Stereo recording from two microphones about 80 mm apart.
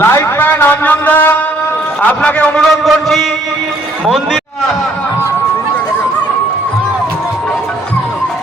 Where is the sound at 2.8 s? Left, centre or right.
Centre.